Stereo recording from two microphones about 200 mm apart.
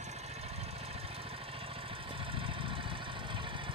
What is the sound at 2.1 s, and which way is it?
Vehicle, 25° right (ahead or behind).